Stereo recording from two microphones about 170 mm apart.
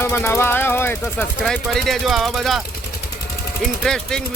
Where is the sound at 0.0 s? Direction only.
15° left (ahead or behind).